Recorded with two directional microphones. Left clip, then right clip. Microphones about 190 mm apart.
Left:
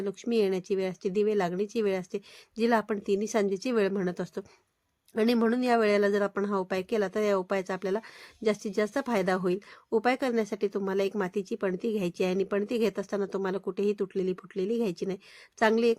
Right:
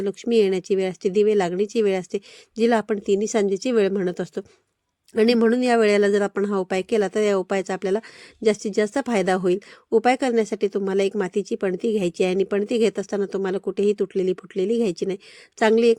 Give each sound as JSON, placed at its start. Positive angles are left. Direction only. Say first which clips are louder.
{"t": 0.0, "sound": "speech", "louder": "right 8 dB", "side_deg": -30}